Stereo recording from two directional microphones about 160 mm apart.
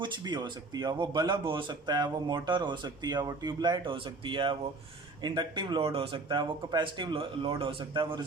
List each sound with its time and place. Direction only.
0.0 s a man's voice: 30° right (ahead or behind)